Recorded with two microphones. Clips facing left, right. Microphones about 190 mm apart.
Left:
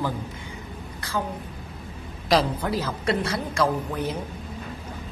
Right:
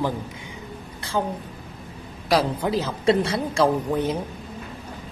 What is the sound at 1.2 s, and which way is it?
Speech, 25° right (ahead or behind).